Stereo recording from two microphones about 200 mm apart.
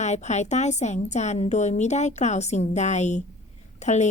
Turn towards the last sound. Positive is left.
turn(degrees=35)  # may be behind; listen again after turning